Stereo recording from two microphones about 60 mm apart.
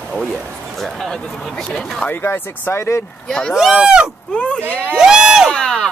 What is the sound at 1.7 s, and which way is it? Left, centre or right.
Speech, left.